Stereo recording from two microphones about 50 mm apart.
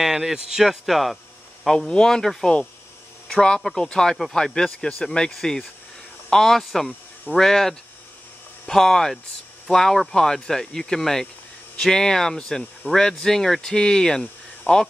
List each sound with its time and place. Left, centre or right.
0.0 s a man's voice: centre
1.8 s a man's voice: centre